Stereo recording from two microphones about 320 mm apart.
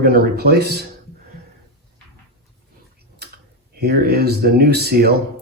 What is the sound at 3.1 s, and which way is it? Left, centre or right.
Speech, right.